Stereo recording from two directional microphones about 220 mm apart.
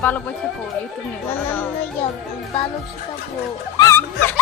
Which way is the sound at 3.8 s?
10° left (ahead or behind).